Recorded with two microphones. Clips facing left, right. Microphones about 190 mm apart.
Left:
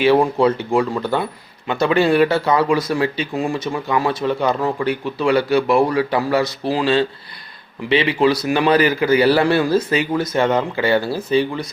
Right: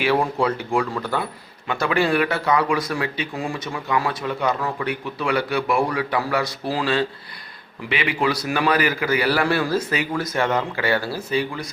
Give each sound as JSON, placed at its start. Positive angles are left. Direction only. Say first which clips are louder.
{"t": 0.0, "sound": "speech", "louder": "left 6 dB", "side_deg": 25}